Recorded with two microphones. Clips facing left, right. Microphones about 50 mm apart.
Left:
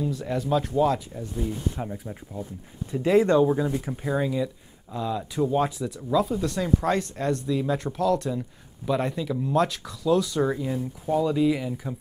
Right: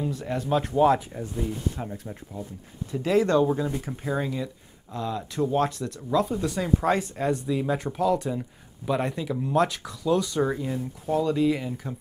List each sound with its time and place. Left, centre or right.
0.1 s speech: centre
0.7 s speech: right
1.8 s speech: centre